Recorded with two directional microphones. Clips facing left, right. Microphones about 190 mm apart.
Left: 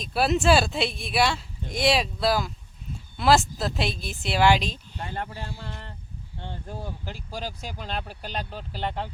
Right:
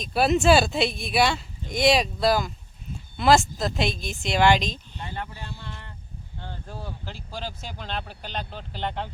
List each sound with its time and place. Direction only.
0.0 s speech: centre (ahead or behind)
5.1 s speech: 45° left (ahead or behind)
6.4 s speech: 15° left (ahead or behind)